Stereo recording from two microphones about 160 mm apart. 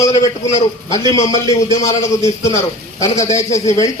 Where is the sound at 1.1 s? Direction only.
20° left (ahead or behind).